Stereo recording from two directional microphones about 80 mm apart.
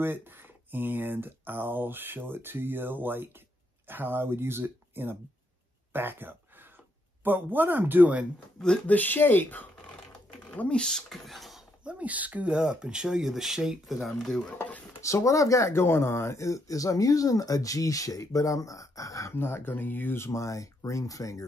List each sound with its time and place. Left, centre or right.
0.0 s speech: right
8.8 s speech: left; by 11.6 s centre
11.8 s speech: centre
15.0 s speech: left
19.3 s speech: left
20.2 s speech: left